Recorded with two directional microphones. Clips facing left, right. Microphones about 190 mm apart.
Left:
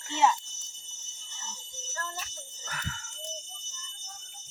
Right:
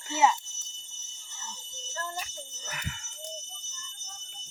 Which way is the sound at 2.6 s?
15° right (ahead or behind).